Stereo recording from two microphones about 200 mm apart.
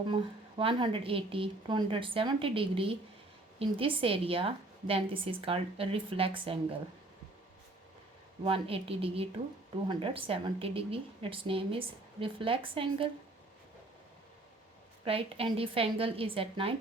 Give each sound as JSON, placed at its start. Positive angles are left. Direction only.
{"t": 0.1, "sound": "a woman's voice", "side_deg": -25}
{"t": 8.4, "sound": "a woman's voice", "side_deg": -30}
{"t": 15.0, "sound": "a woman's voice", "side_deg": -30}